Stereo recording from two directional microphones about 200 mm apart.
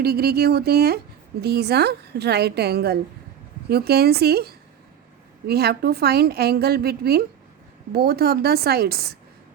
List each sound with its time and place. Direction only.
0.0 s a woman's voice: 50° right (ahead or behind)